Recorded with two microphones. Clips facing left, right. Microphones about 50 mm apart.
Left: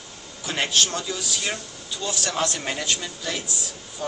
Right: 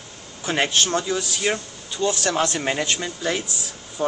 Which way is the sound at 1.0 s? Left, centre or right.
Right.